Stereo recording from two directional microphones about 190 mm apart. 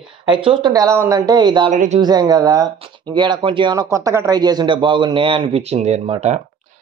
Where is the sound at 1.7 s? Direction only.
40° right (ahead or behind).